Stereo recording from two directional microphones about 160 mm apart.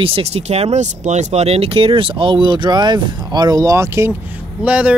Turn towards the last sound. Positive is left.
turn(degrees=-10)  # may be behind; listen again after turning